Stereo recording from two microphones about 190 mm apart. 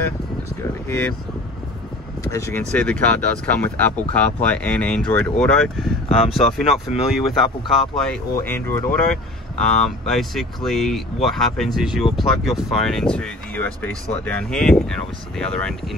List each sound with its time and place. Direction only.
0.8 s speech: 15° left (ahead or behind)
2.3 s speech: 15° left (ahead or behind)
2.6 s speech: 5° left (ahead or behind)
6.2 s speech: 30° left (ahead or behind)
6.9 s speech: centre (ahead or behind)